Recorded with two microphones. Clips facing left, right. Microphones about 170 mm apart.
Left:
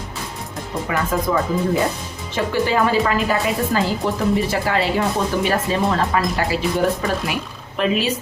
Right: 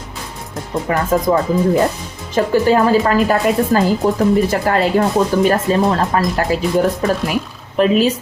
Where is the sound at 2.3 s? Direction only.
45° right (ahead or behind).